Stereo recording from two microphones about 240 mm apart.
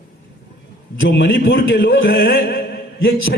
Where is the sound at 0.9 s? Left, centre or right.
Left.